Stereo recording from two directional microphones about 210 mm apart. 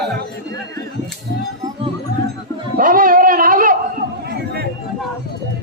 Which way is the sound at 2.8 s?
40° right (ahead or behind).